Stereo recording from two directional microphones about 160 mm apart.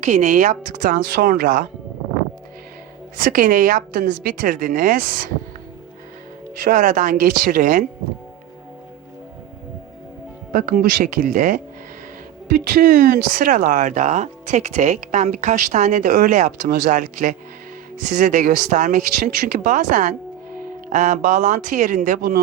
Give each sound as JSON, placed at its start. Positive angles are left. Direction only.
{"t": 0.0, "sound": "speech", "side_deg": -50}
{"t": 3.2, "sound": "a woman's voice", "side_deg": -55}
{"t": 6.7, "sound": "a woman's voice", "side_deg": -50}
{"t": 10.5, "sound": "a woman's voice", "side_deg": -60}
{"t": 12.5, "sound": "speech", "side_deg": -65}